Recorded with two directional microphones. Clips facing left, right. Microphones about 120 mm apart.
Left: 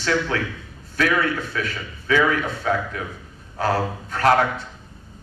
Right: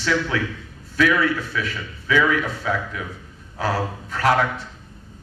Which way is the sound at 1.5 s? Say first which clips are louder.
Even; 45° left (ahead or behind).